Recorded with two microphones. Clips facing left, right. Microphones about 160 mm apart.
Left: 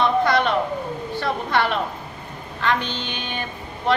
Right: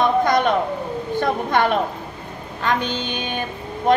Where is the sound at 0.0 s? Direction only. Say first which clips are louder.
Right 2 dB; 45° right (ahead or behind).